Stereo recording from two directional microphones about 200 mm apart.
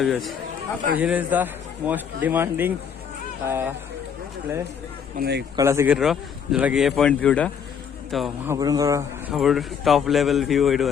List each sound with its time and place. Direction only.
0.0 s a man's voice: centre (ahead or behind)
5.1 s a man's voice: 55° right (ahead or behind)
5.5 s speech: 15° right (ahead or behind)
8.4 s a man's voice: 20° right (ahead or behind)
9.3 s speech: centre (ahead or behind)